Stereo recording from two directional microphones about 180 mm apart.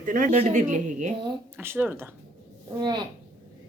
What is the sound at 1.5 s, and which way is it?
Speech, 10° right (ahead or behind).